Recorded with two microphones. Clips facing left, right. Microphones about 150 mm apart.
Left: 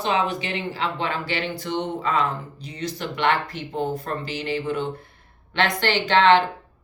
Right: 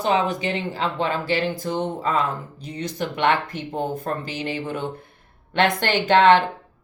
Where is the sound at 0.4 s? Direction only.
40° right (ahead or behind).